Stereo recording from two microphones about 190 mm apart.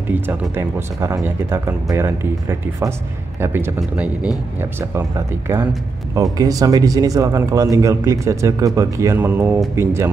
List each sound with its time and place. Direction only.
0.1 s speech: 10° right (ahead or behind)